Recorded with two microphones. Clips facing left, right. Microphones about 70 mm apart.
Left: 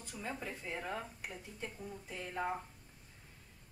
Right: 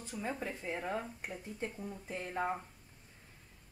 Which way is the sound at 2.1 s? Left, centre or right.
Right.